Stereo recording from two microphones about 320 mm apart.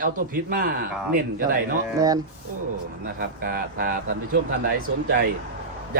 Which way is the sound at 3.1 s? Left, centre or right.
Right.